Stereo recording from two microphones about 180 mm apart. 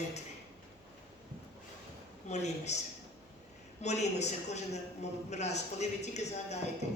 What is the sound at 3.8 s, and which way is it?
A man's voice, 40° left (ahead or behind).